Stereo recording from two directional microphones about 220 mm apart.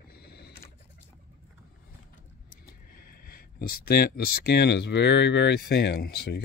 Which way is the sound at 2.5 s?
40° left (ahead or behind).